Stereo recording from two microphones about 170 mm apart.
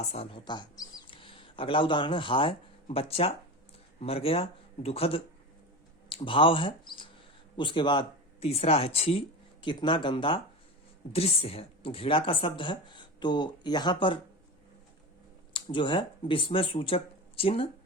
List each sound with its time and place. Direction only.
0.0 s speech: 40° left (ahead or behind)
15.5 s speech: 30° left (ahead or behind)